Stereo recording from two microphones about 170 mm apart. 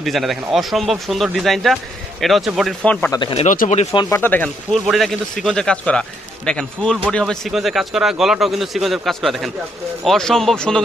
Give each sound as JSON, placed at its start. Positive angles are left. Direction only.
{"t": 0.0, "sound": "a man's voice", "side_deg": 0}
{"t": 3.1, "sound": "speech", "side_deg": 30}
{"t": 3.4, "sound": "speech", "side_deg": 45}
{"t": 3.9, "sound": "speech", "side_deg": 25}
{"t": 4.2, "sound": "a man's voice", "side_deg": 10}